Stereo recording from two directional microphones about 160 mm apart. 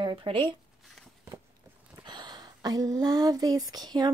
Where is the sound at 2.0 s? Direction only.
25° right (ahead or behind).